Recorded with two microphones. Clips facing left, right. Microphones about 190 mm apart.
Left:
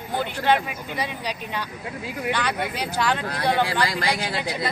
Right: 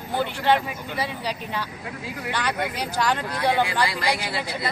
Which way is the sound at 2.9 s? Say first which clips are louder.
Even; 10° right (ahead or behind).